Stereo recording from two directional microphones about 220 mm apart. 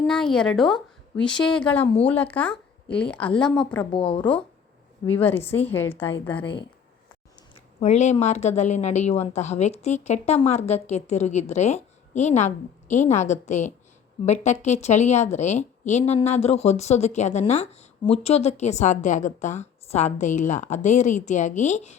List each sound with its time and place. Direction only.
0.1 s a woman's voice: 5° left (ahead or behind)
3.9 s speech: 25° left (ahead or behind)
5.1 s a woman's voice: 10° left (ahead or behind)
7.8 s a woman's voice: 30° left (ahead or behind)